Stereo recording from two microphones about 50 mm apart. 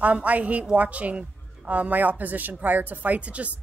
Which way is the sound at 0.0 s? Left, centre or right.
Right.